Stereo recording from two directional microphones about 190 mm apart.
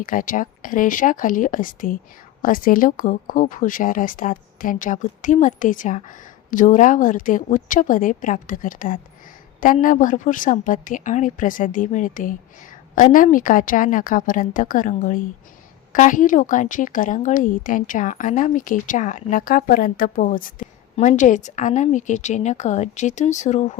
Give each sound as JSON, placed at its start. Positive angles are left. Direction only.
{"t": 0.0, "sound": "a woman's voice", "side_deg": 45}